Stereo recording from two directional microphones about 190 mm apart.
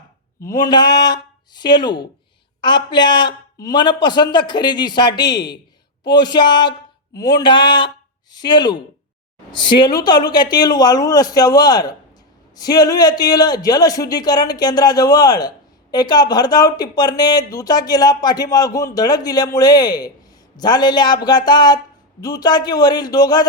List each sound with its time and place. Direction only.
0.4 s a man's voice: 20° left (ahead or behind)